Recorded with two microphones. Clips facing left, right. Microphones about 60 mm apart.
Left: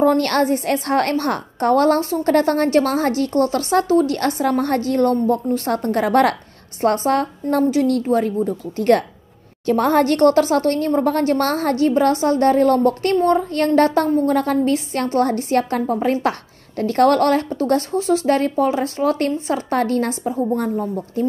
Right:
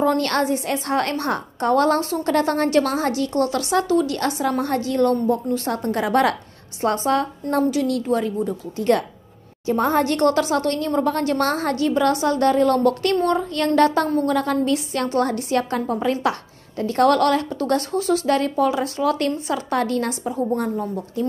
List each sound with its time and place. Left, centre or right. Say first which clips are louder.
0.0 s a woman's voice: left 4 dB; left
8.7 s a woman's voice: left 4 dB; left
16.7 s a woman's voice: left 2 dB; left